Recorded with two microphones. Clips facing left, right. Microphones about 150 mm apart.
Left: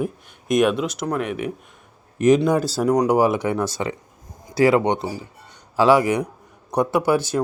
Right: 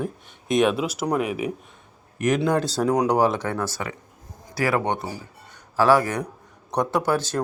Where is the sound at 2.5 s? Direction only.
5° left (ahead or behind).